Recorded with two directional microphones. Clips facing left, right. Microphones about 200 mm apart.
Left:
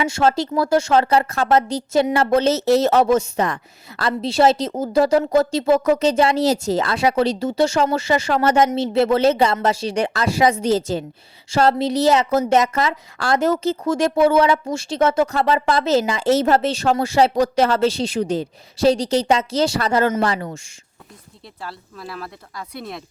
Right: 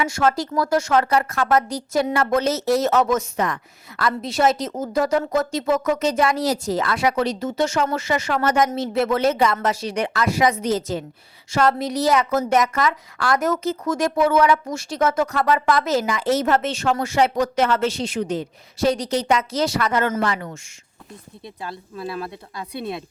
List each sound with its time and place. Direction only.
0.0 s speech: 30° left (ahead or behind)
21.6 s speech: 20° right (ahead or behind)